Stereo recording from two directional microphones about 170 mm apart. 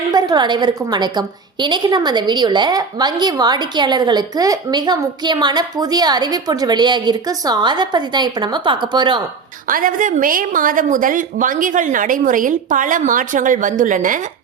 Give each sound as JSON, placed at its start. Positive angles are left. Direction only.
{"t": 0.1, "sound": "a woman's voice", "side_deg": -25}
{"t": 9.6, "sound": "a woman's voice", "side_deg": -55}